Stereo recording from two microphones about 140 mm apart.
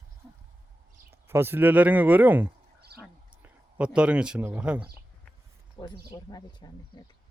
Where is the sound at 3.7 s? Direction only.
10° right (ahead or behind).